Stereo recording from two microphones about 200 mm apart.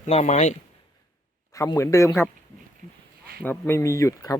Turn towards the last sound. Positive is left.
turn(degrees=15)  # may be behind; listen again after turning